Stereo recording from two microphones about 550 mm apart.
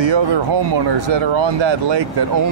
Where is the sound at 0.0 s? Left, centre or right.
Right.